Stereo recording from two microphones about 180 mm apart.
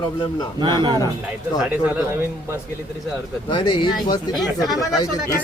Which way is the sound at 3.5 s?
25° left (ahead or behind).